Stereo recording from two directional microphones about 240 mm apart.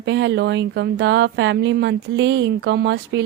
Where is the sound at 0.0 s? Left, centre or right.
Right.